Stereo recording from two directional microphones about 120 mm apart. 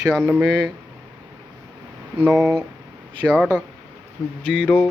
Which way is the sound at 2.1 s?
10° right (ahead or behind).